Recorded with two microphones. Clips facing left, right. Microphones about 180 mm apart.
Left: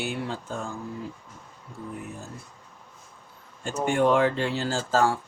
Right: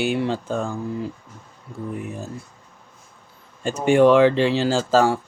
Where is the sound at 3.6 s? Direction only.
80° right.